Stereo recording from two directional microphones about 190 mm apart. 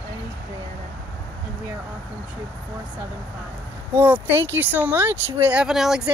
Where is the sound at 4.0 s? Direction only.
10° right (ahead or behind).